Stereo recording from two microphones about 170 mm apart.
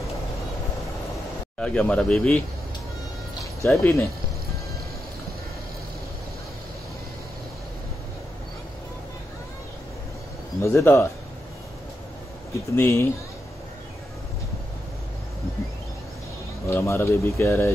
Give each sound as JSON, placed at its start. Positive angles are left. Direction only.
{"t": 1.6, "sound": "speech", "side_deg": 5}
{"t": 3.8, "sound": "speech", "side_deg": 15}
{"t": 10.6, "sound": "speech", "side_deg": 15}
{"t": 12.5, "sound": "speech", "side_deg": 15}
{"t": 16.6, "sound": "speech", "side_deg": 15}